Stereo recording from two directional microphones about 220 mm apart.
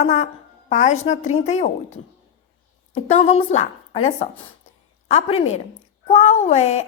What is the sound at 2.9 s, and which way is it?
A woman's voice, 30° left (ahead or behind).